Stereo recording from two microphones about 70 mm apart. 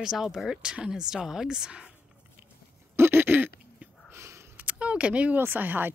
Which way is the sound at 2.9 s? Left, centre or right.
Right.